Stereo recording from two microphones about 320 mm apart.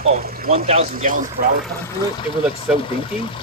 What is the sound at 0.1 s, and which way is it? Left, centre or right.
Speech, right.